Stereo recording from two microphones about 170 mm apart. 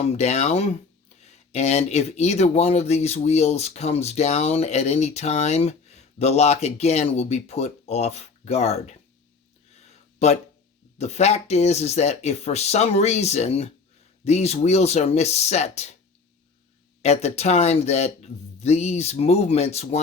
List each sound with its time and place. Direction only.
0.0 s speech: 40° left (ahead or behind)
9.7 s a sound: 40° left (ahead or behind)
10.9 s speech: 40° left (ahead or behind)
17.0 s speech: 40° left (ahead or behind)